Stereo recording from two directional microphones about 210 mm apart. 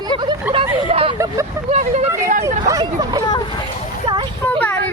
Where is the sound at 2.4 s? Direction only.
15° right (ahead or behind).